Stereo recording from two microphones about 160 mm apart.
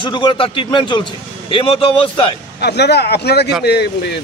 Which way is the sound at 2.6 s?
90° left.